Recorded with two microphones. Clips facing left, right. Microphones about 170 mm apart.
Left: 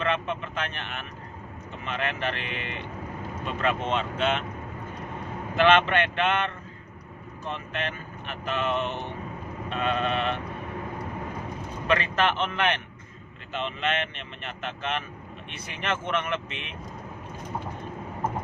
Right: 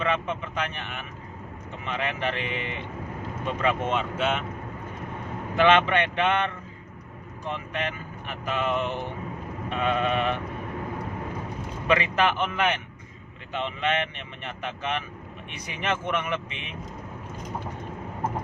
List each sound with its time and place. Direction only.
0.0 s speech: 15° right (ahead or behind)
5.6 s speech: 15° right (ahead or behind)
7.4 s speech: 15° right (ahead or behind)
11.9 s speech: 15° right (ahead or behind)